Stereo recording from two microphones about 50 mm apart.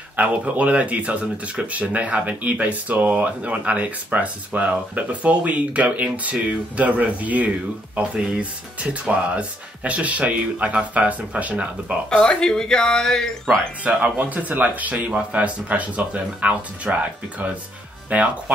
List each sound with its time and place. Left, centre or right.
0.1 s speech: right
12.1 s speech: centre
13.8 s speech: right